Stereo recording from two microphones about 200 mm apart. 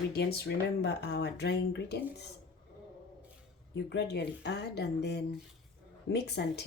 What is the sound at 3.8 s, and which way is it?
Speech, 55° left (ahead or behind).